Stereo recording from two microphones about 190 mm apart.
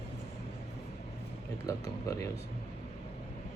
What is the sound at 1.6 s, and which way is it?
Speech, 20° left (ahead or behind).